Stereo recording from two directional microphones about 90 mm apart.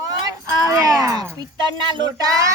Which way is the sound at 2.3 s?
35° right (ahead or behind).